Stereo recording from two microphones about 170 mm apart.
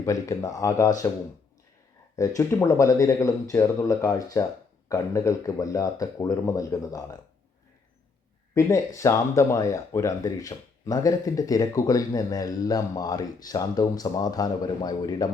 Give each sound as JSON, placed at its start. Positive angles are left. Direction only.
{"t": 0.0, "sound": "speech", "side_deg": 20}
{"t": 2.1, "sound": "speech", "side_deg": 20}
{"t": 8.5, "sound": "speech", "side_deg": 15}